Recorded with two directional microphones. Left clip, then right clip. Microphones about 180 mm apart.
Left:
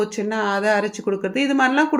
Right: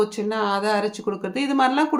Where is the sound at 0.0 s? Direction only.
15° left (ahead or behind).